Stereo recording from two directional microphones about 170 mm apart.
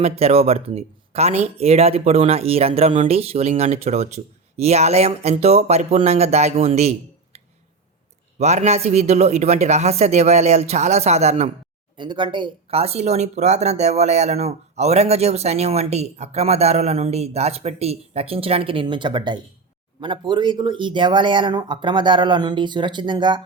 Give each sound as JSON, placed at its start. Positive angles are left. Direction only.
{"t": 0.0, "sound": "speech", "side_deg": -35}
{"t": 8.4, "sound": "speech", "side_deg": -40}
{"t": 11.9, "sound": "speech", "side_deg": -25}